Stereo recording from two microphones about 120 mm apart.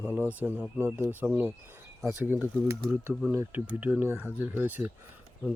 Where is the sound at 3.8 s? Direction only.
15° right (ahead or behind).